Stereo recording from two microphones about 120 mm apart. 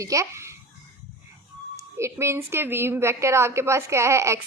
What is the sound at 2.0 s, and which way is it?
A woman's voice, 25° right (ahead or behind).